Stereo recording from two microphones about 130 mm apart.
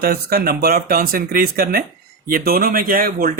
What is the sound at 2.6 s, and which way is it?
Speech, 90° right.